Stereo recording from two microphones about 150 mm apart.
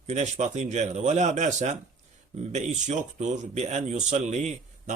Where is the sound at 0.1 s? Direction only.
50° right (ahead or behind).